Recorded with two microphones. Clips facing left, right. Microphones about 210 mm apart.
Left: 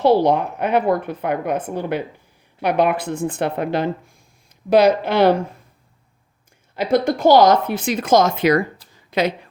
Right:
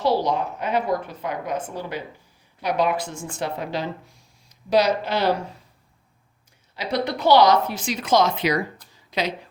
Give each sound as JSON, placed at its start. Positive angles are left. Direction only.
{"t": 0.0, "sound": "a woman's voice", "side_deg": 60}
{"t": 6.7, "sound": "speech", "side_deg": 50}
{"t": 9.0, "sound": "a sound", "side_deg": 55}